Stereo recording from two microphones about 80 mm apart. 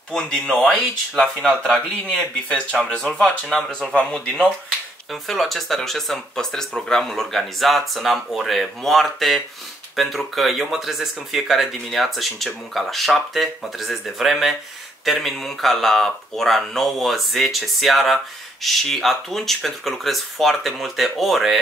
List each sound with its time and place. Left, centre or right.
0.1 s speech: centre